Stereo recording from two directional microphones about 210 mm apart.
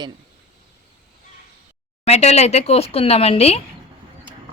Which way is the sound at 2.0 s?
30° left (ahead or behind).